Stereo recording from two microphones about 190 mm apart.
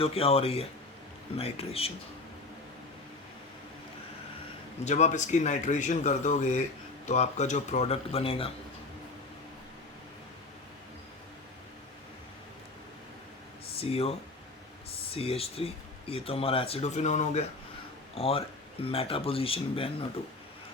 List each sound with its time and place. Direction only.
0.0 s speech: 30° left (ahead or behind)
4.9 s speech: 40° left (ahead or behind)
13.7 s speech: 30° left (ahead or behind)